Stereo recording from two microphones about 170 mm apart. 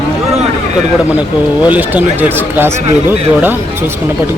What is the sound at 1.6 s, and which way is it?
A man's voice, 10° right (ahead or behind).